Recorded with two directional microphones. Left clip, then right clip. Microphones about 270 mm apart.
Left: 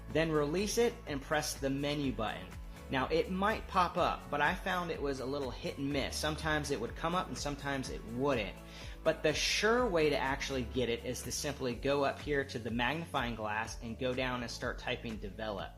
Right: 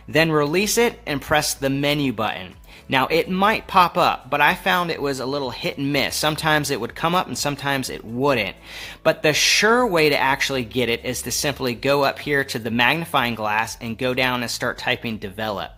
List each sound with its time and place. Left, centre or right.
0.1 s speech: right